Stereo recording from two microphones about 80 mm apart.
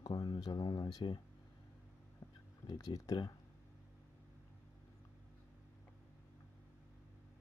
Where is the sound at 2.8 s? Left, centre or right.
Left.